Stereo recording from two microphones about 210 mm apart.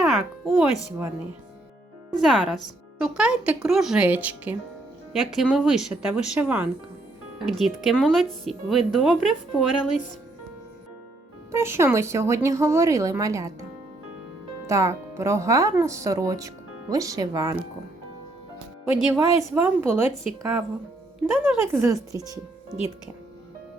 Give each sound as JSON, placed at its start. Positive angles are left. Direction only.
{"t": 0.0, "sound": "speech", "side_deg": 0}
{"t": 2.2, "sound": "speech", "side_deg": 0}
{"t": 11.5, "sound": "speech", "side_deg": -10}
{"t": 14.7, "sound": "speech", "side_deg": -15}
{"t": 19.1, "sound": "speech", "side_deg": -15}
{"t": 21.4, "sound": "speech", "side_deg": -10}